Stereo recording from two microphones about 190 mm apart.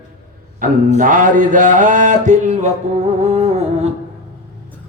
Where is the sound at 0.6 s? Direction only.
45° right (ahead or behind).